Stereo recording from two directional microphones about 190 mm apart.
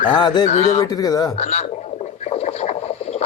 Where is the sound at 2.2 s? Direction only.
35° left (ahead or behind).